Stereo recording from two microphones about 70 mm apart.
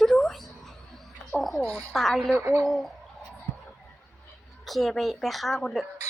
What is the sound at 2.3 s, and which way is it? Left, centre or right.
Speech, right.